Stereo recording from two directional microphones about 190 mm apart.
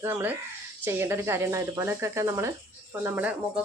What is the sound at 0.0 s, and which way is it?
Speech, 10° right (ahead or behind).